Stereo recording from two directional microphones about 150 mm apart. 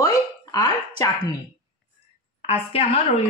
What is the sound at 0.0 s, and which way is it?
Hiccup, 25° left (ahead or behind).